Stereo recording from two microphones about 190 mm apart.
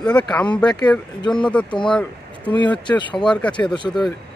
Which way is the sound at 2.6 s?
25° left (ahead or behind).